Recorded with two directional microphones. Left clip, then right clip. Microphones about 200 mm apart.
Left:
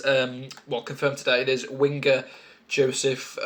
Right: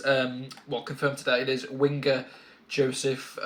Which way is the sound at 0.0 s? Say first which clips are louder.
Left 2 dB; 35° left (ahead or behind).